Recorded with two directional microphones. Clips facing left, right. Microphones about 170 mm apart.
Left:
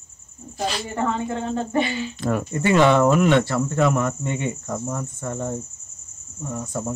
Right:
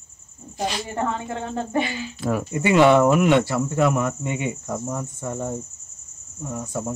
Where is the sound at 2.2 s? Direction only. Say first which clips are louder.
Right 1 dB; 5° right (ahead or behind).